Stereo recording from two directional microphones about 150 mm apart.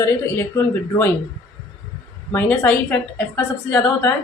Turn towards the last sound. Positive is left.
turn(degrees=15)  # may be behind; listen again after turning